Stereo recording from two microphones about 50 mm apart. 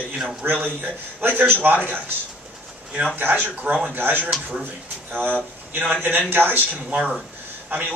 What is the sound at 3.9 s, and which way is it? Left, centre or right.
A man's voice, right.